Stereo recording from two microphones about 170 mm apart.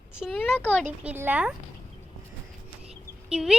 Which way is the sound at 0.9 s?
10° right (ahead or behind).